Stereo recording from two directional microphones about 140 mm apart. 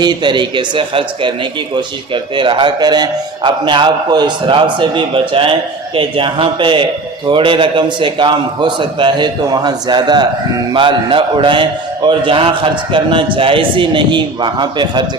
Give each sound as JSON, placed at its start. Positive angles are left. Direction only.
{"t": 0.0, "sound": "a man's voice", "side_deg": -30}